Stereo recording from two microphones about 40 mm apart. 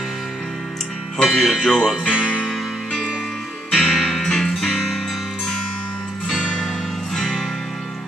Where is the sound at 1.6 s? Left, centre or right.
Centre.